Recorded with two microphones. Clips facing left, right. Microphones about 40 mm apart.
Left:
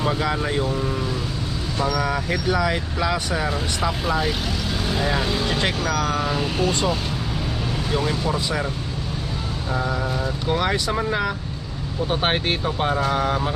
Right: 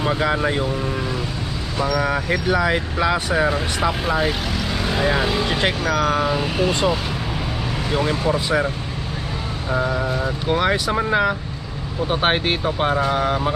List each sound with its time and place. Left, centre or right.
0.0 s speech: centre
9.7 s speech: centre